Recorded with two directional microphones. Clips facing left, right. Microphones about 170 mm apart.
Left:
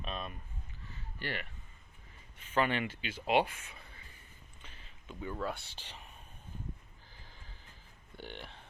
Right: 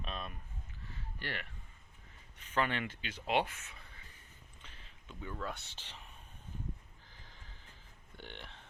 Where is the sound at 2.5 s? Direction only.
10° left (ahead or behind).